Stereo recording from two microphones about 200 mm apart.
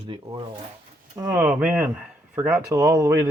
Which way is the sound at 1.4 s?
10° right (ahead or behind).